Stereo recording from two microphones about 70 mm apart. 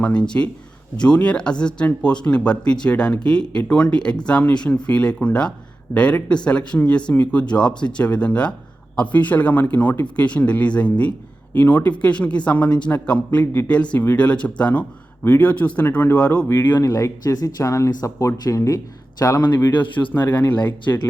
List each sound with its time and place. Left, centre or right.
0.0 s speech: centre
16.5 s speech: left
16.8 s speech: left
19.5 s speech: left